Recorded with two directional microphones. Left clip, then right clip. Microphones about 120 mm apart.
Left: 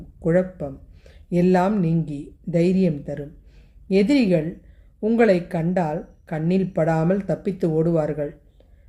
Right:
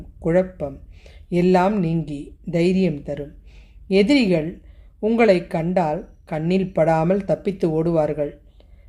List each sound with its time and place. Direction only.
0.3 s speech: 20° right (ahead or behind)